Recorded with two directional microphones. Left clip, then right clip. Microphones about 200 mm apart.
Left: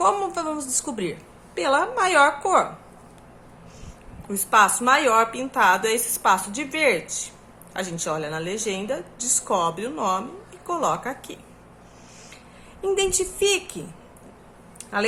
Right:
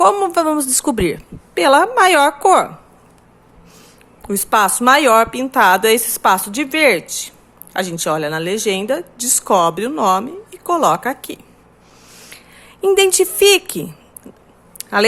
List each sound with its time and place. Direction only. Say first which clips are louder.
0.0 s a woman's voice: right 9 dB; 45° right (ahead or behind)
4.3 s a woman's voice: right 3 dB; 45° right (ahead or behind)
12.8 s a woman's voice: right 10 dB; 45° right (ahead or behind)
14.8 s a sound: right 10 dB; 50° right (ahead or behind)